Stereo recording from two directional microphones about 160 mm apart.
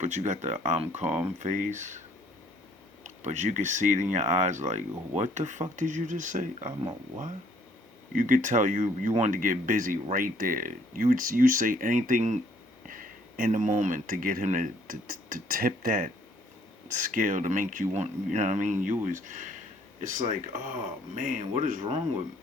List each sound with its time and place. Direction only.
0.0 s speech: 50° right (ahead or behind)
3.0 s speech: 50° right (ahead or behind)
8.1 s speech: 55° right (ahead or behind)